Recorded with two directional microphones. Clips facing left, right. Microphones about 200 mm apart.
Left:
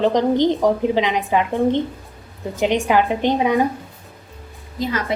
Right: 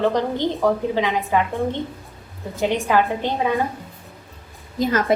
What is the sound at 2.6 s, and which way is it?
A woman's voice, 15° left (ahead or behind).